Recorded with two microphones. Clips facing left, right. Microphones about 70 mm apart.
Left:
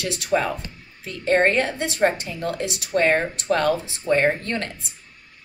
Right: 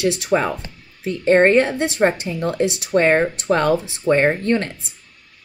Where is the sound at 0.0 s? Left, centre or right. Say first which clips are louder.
Right 4 dB; right.